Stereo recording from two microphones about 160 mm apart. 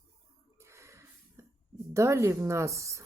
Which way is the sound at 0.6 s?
15° right (ahead or behind).